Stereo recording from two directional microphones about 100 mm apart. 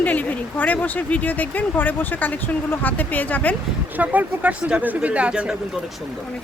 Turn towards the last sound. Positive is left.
turn(degrees=-10)  # may be behind; listen again after turning